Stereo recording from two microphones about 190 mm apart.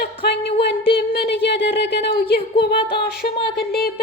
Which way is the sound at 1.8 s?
60° left (ahead or behind).